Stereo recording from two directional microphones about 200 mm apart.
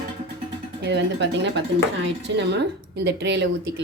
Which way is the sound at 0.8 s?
60° right (ahead or behind).